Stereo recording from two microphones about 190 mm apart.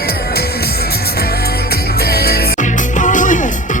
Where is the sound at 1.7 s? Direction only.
55° left (ahead or behind).